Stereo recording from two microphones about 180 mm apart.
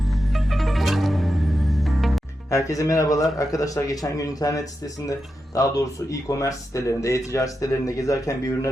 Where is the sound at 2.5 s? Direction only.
15° left (ahead or behind).